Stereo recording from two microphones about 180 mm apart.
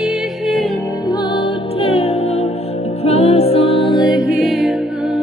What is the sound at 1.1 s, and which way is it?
Music, 25° left (ahead or behind).